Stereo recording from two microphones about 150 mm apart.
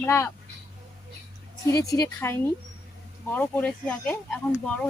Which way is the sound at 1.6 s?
20° left (ahead or behind).